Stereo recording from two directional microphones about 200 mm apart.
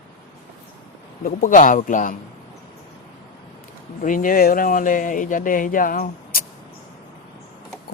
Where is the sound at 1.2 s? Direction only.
40° left (ahead or behind).